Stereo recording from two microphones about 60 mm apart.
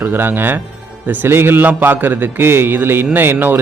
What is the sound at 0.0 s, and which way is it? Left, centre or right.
Speech, right.